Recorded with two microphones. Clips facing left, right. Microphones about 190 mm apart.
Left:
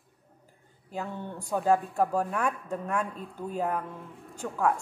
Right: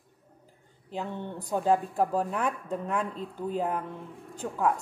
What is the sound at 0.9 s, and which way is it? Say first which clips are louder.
Speech: right 1 dB; 20° right (ahead or behind).